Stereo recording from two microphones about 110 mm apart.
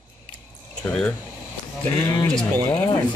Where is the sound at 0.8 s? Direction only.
10° left (ahead or behind).